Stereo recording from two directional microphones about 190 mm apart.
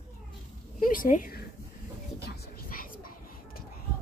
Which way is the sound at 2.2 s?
55° left (ahead or behind).